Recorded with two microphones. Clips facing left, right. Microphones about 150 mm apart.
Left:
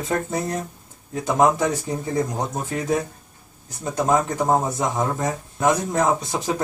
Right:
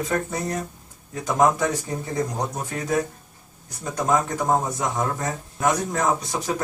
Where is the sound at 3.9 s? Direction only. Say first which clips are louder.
Left 2 dB; 20° left (ahead or behind).